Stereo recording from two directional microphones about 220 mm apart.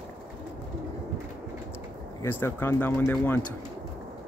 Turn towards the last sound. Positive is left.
turn(degrees=10)  # may be behind; listen again after turning